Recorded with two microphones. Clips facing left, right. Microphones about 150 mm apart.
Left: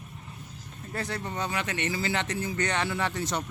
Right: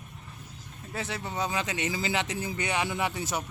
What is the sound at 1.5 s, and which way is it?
Speech, 15° right (ahead or behind).